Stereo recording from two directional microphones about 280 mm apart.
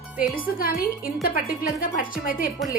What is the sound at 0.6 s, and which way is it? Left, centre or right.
A woman's voice, left.